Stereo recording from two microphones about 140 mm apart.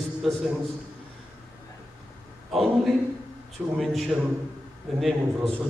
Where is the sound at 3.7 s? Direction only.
Centre (ahead or behind).